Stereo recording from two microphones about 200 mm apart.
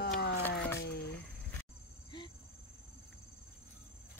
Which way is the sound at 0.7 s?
55° left (ahead or behind).